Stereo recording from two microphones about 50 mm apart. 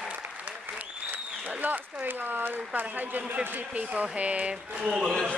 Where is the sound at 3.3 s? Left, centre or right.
Right.